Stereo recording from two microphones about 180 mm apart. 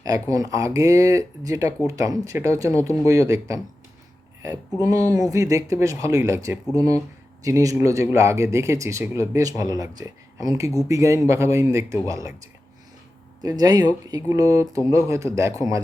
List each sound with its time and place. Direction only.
0.0 s speech: 20° right (ahead or behind)
4.8 s speech: 20° right (ahead or behind)
13.4 s speech: 20° right (ahead or behind)